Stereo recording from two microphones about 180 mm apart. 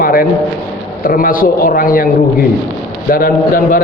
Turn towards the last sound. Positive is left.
turn(degrees=50)  # may be behind; listen again after turning